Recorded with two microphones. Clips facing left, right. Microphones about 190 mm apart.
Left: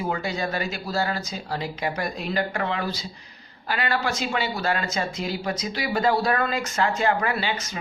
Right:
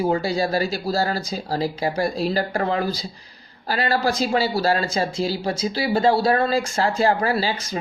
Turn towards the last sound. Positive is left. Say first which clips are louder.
# right 4 dB
turn(degrees=-35)  # may be behind; listen again after turning